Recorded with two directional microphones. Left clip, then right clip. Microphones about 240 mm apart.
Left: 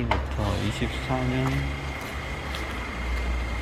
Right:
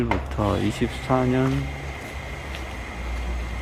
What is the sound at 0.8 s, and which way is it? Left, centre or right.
Speech, right.